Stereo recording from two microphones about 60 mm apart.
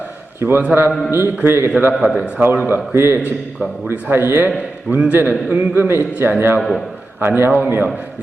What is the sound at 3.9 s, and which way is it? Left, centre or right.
Speech, right.